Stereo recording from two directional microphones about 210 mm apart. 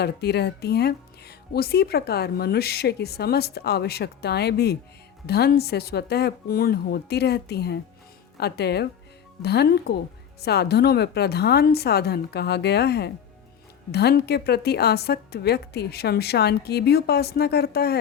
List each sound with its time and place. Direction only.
0.0 s speech: 50° left (ahead or behind)